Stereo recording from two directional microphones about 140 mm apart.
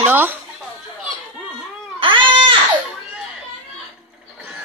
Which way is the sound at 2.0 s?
35° right (ahead or behind).